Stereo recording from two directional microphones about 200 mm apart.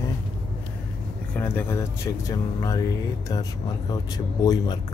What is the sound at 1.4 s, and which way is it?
Speech, 10° left (ahead or behind).